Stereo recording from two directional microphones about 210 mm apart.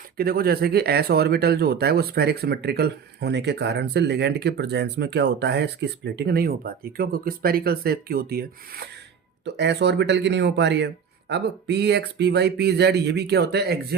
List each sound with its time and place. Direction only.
0.2 s speech: 45° right (ahead or behind)